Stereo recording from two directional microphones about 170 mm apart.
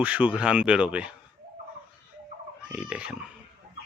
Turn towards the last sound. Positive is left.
turn(degrees=-5)  # may be behind; listen again after turning